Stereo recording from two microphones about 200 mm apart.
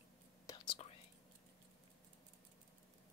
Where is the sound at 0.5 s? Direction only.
25° left (ahead or behind).